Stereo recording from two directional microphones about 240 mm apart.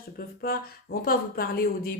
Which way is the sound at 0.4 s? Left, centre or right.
Left.